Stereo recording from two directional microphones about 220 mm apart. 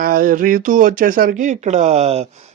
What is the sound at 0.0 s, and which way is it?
Speech, 40° right (ahead or behind).